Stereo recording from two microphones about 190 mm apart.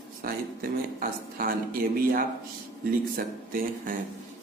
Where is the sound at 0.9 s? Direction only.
50° right (ahead or behind).